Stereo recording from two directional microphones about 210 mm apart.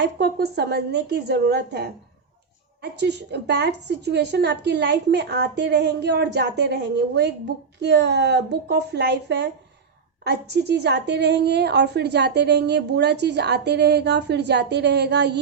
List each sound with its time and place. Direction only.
0.0 s a woman's voice: 50° right (ahead or behind)
3.0 s a woman's voice: 55° right (ahead or behind)